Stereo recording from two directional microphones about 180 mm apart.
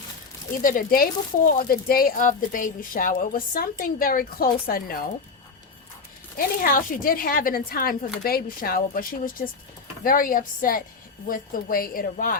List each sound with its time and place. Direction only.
0.6 s speech: 50° left (ahead or behind)
6.3 s speech: 55° left (ahead or behind)